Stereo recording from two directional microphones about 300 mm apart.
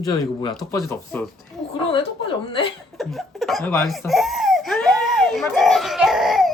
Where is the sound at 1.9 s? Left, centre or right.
Centre.